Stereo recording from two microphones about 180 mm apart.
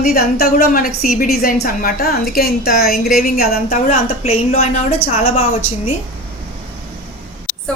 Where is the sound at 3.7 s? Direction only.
35° left (ahead or behind).